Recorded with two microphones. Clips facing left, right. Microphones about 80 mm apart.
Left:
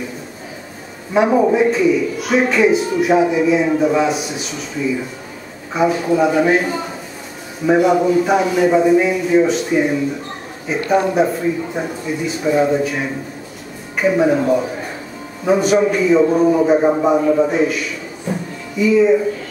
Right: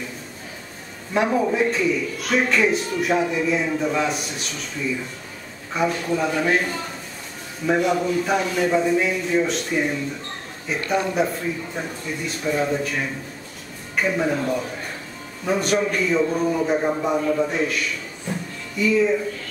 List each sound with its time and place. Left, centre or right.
1.1 s a man's voice: centre
16.2 s a man's voice: centre